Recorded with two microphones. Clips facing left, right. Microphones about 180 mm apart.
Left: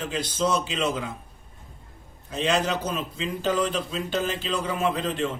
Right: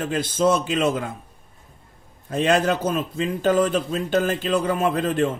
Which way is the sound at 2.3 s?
50° right (ahead or behind).